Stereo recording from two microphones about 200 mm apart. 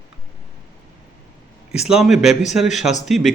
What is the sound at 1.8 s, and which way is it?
A man's voice, centre (ahead or behind).